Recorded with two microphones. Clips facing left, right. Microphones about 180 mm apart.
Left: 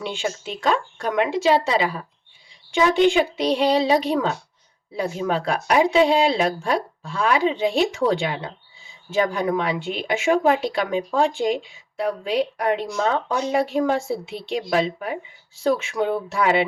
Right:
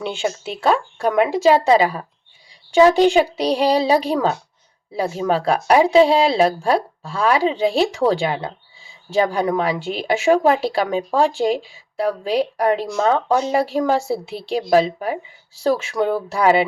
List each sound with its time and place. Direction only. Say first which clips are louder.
0.9 s speech: right 4 dB; 35° right (ahead or behind)